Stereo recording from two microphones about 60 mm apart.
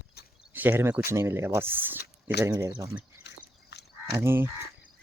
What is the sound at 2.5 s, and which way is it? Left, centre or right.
Speech, right.